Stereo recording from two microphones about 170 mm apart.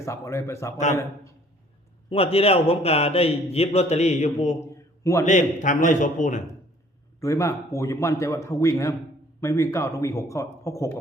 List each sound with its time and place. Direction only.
0.0 s a man's voice: 15° left (ahead or behind)
2.0 s a man's voice: 35° left (ahead or behind)
4.6 s a sound: 15° left (ahead or behind)
5.2 s a man's voice: 45° left (ahead or behind)
7.2 s a man's voice: 15° left (ahead or behind)